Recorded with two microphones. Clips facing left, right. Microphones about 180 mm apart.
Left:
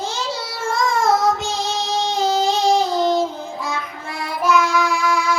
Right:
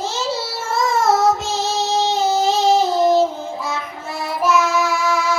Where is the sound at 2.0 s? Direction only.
5° right (ahead or behind).